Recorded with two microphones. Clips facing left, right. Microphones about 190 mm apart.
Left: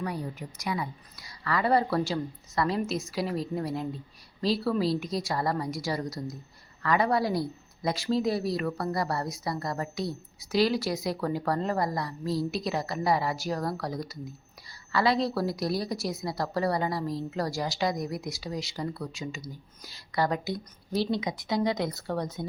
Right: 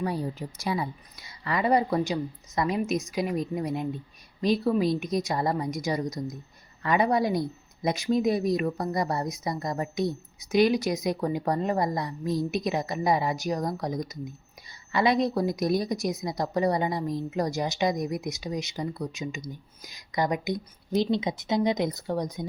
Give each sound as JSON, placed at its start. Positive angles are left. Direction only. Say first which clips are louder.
{"t": 0.0, "sound": "speech", "louder": "right 4 dB", "side_deg": -30}